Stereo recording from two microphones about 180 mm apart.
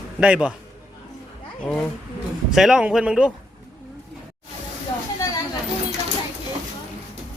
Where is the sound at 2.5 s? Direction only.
5° right (ahead or behind).